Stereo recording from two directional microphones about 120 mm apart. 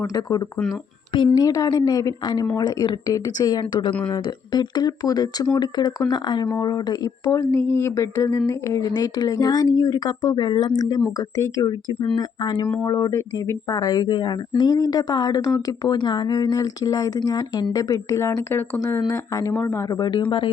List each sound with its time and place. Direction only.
0.0 s speech: 30° left (ahead or behind)
12.8 s speech: 30° left (ahead or behind)